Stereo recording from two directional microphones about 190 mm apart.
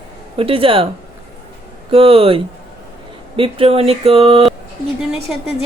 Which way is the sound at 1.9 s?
30° right (ahead or behind).